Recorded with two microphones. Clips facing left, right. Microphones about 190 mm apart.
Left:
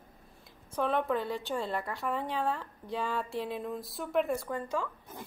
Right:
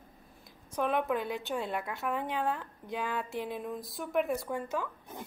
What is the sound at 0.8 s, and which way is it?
Speech, 5° right (ahead or behind).